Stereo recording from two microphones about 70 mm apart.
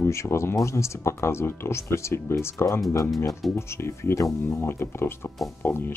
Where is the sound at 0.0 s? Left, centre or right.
Left.